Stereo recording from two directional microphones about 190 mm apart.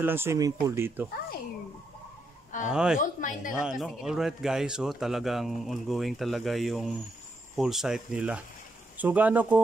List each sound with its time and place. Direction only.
0.0 s speech: 10° right (ahead or behind)
2.7 s speech: 5° right (ahead or behind)
3.0 s speech: 45° left (ahead or behind)
3.5 s speech: 5° right (ahead or behind)